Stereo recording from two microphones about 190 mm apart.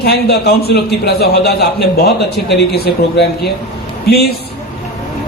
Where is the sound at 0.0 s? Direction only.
55° left (ahead or behind).